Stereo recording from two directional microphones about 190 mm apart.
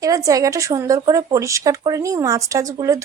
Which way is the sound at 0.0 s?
20° right (ahead or behind).